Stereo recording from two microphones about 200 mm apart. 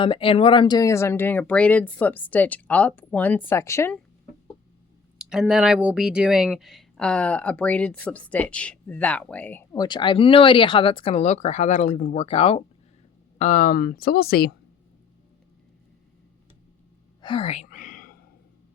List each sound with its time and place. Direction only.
0.0 s speech: 25° left (ahead or behind)
5.1 s speech: 5° right (ahead or behind); by 14.5 s 50° left (ahead or behind)
17.2 s a sound: 25° left (ahead or behind); by 18.1 s 45° left (ahead or behind)